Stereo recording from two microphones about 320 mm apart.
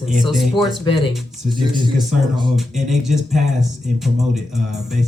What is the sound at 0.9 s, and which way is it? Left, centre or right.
Speech, left.